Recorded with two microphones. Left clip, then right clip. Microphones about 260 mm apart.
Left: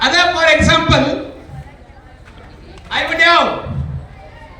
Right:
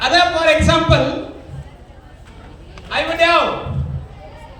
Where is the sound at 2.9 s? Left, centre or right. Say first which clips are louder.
Left 3 dB; right.